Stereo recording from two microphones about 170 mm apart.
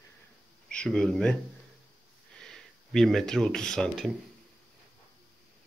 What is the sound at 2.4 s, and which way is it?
Speech, 5° left (ahead or behind).